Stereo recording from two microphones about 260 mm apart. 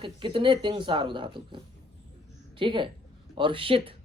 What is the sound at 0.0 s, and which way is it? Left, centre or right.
Speech, centre.